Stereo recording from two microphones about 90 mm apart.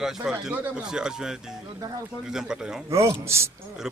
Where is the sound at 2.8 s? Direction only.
30° right (ahead or behind).